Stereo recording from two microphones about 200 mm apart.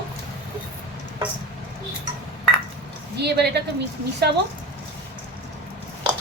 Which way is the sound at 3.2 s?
55° right (ahead or behind).